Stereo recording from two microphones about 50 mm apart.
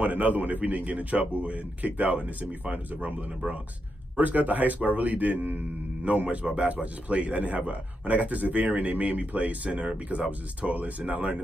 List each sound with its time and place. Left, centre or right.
0.0 s a man's voice: right
4.2 s a man's voice: right